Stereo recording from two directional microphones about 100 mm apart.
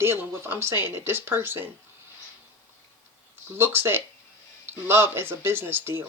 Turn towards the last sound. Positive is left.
turn(degrees=-25)  # may be behind; listen again after turning